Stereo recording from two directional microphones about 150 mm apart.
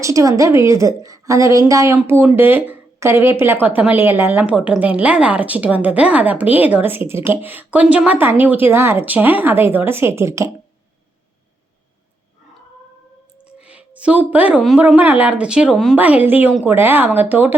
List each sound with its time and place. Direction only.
0.0 s a woman's voice: 20° right (ahead or behind)
13.4 s a sound: 10° right (ahead or behind)
14.8 s a woman's voice: 10° right (ahead or behind)